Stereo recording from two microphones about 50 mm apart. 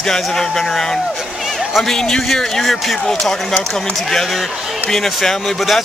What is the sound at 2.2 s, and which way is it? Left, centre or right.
A man's voice, centre.